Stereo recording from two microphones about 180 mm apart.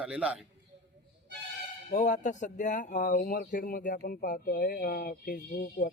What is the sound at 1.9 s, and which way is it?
Speech, 45° left (ahead or behind).